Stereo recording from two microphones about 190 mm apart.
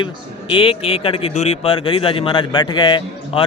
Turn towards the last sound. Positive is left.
turn(degrees=25)  # may be behind; listen again after turning